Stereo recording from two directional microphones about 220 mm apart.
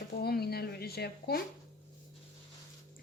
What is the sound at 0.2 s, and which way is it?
Speech, 45° left (ahead or behind).